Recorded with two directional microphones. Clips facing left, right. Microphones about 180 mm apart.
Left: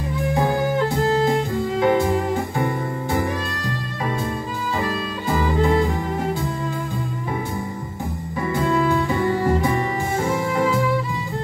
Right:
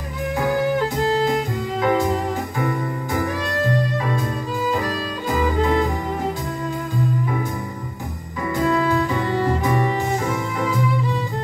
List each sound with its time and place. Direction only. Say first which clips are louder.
1.2 s music: left 1 dB; 30° left (ahead or behind)